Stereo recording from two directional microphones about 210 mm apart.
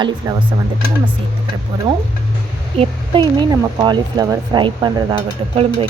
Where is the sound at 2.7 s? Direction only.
25° right (ahead or behind).